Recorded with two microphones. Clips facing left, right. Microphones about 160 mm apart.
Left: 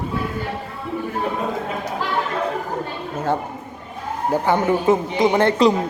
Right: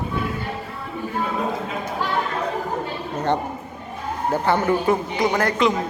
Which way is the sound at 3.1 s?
5° left (ahead or behind).